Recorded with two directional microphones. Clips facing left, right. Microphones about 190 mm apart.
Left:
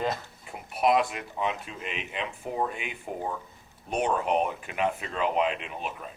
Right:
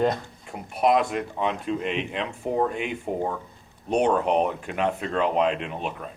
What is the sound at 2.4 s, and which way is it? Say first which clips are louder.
Speech: right 7 dB; 35° right (ahead or behind).